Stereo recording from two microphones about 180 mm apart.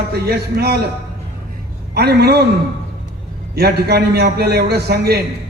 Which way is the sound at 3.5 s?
60° right (ahead or behind).